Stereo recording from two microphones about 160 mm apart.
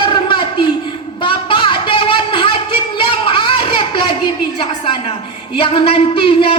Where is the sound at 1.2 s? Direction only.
30° left (ahead or behind).